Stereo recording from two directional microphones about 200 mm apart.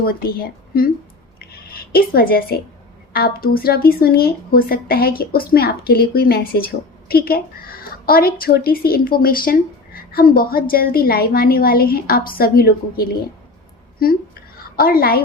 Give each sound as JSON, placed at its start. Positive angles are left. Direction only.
{"t": 0.0, "sound": "speech", "side_deg": 50}
{"t": 1.4, "sound": "a sound", "side_deg": 50}
{"t": 3.1, "sound": "speech", "side_deg": 50}